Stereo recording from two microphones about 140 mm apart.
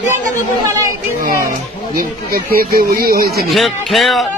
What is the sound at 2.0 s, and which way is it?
Speech, 90° right.